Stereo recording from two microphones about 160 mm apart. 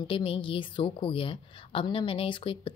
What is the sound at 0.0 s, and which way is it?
A woman's voice, 35° left (ahead or behind).